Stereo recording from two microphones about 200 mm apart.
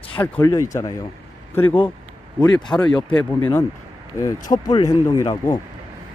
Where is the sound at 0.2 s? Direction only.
10° left (ahead or behind).